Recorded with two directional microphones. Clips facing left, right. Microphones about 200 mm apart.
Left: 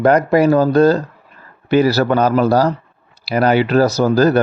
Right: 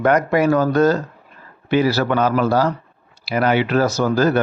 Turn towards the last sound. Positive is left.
turn(degrees=35)  # may be behind; listen again after turning